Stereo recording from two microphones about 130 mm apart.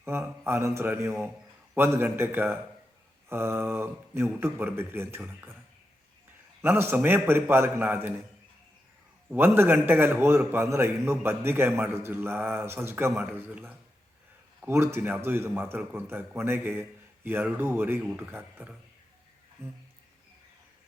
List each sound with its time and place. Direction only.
0.0 s a man's voice: 20° right (ahead or behind)
6.6 s a man's voice: 20° right (ahead or behind)
9.3 s a man's voice: 15° right (ahead or behind)